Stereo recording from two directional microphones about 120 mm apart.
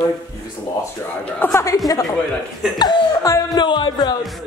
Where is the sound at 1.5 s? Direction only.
25° left (ahead or behind).